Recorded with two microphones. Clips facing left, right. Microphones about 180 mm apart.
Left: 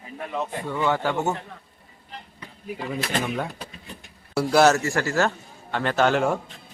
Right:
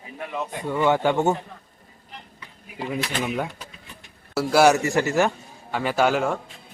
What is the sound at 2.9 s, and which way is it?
A man's voice, centre (ahead or behind).